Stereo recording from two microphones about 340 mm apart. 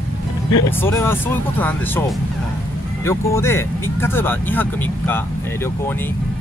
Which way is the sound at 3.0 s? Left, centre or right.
Centre.